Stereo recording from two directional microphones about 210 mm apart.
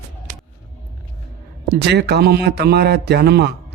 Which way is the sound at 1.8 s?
50° right (ahead or behind).